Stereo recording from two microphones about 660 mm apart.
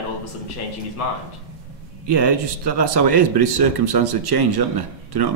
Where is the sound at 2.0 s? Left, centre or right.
Right.